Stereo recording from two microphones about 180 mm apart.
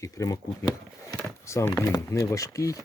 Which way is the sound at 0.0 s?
20° left (ahead or behind).